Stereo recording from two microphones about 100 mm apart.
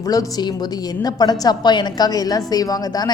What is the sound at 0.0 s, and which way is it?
A woman's voice, 35° left (ahead or behind).